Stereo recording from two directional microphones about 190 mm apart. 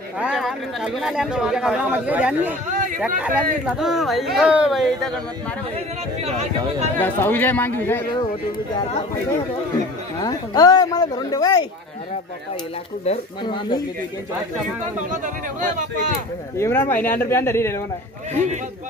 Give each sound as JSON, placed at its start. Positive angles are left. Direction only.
{"t": 0.2, "sound": "speech", "side_deg": 0}
{"t": 2.7, "sound": "a sound", "side_deg": -40}
{"t": 3.2, "sound": "speech", "side_deg": -5}
{"t": 6.2, "sound": "speech", "side_deg": -35}
{"t": 7.0, "sound": "speech", "side_deg": 10}
{"t": 10.2, "sound": "speech", "side_deg": 20}
{"t": 13.0, "sound": "speech", "side_deg": 30}
{"t": 15.2, "sound": "speech", "side_deg": -40}
{"t": 16.5, "sound": "speech", "side_deg": 10}
{"t": 18.3, "sound": "speech", "side_deg": -35}